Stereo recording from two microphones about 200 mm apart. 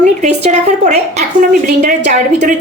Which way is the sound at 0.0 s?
35° right (ahead or behind).